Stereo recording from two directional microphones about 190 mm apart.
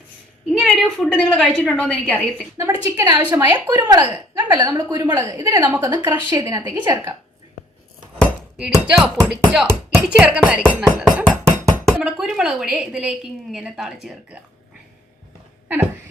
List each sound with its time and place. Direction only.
0.6 s speech: 5° left (ahead or behind)
2.6 s a woman's voice: 15° right (ahead or behind)
4.0 s speech: 10° right (ahead or behind)
4.5 s a woman's voice: 20° right (ahead or behind)
8.5 s speech: 5° right (ahead or behind)